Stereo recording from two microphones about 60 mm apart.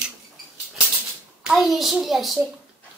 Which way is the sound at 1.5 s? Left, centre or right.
Centre.